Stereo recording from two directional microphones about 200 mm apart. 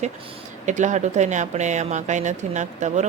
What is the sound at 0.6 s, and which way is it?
Speech, 35° right (ahead or behind).